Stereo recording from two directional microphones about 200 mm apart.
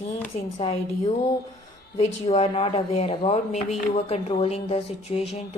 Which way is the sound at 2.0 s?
30° left (ahead or behind).